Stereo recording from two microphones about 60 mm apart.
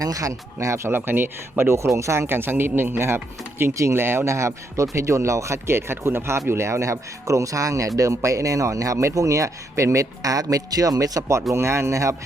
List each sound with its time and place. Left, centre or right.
0.0 s speech: right
0.9 s speech: right
2.2 s a man's voice: right
11.5 s speech: right